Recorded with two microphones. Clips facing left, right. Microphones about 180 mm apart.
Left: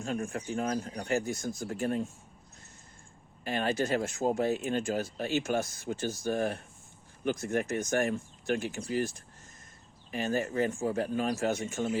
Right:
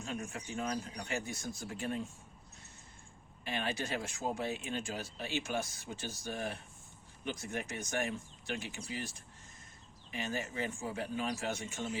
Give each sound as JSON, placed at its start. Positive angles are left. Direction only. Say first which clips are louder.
{"t": 0.0, "sound": "speech", "louder": "left 7 dB", "side_deg": 50}
{"t": 3.4, "sound": "speech", "louder": "left 7 dB", "side_deg": 45}
{"t": 10.1, "sound": "speech", "louder": "left 8 dB", "side_deg": 45}